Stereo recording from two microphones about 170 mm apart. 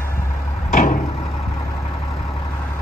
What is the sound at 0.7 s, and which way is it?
Vehicle, 50° left (ahead or behind).